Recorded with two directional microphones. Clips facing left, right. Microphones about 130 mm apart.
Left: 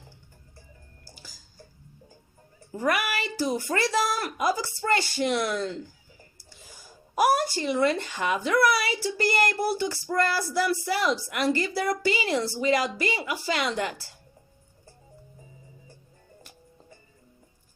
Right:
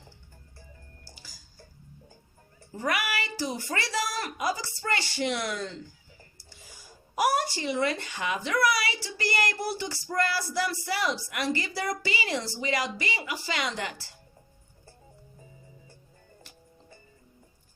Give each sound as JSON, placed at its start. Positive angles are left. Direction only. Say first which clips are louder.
{"t": 2.7, "sound": "speech", "louder": "left 3 dB", "side_deg": 55}
{"t": 6.7, "sound": "speech", "louder": "left 4 dB", "side_deg": 50}